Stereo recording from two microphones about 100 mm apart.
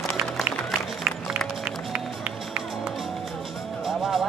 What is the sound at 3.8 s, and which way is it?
Music, centre (ahead or behind).